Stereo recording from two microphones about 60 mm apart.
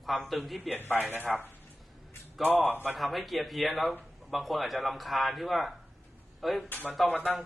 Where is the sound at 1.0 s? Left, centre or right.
Right.